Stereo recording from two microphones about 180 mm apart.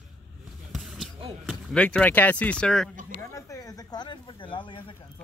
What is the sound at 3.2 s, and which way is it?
Speech, 15° left (ahead or behind).